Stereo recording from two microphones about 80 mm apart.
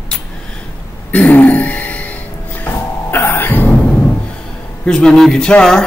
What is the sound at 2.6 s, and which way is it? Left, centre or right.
Music, left.